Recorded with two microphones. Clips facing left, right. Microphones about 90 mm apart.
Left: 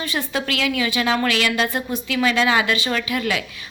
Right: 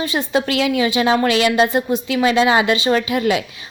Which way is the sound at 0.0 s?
20° right (ahead or behind).